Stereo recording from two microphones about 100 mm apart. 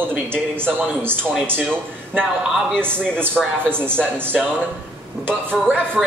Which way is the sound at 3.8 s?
10° left (ahead or behind).